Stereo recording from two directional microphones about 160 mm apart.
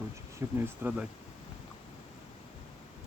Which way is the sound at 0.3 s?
10° right (ahead or behind).